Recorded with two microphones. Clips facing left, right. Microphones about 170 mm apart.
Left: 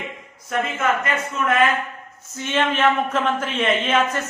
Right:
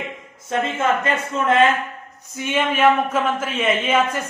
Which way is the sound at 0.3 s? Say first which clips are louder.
Right 2 dB; 25° right (ahead or behind).